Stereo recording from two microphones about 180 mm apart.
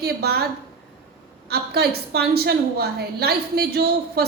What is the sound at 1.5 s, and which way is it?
A woman's voice, 65° right (ahead or behind).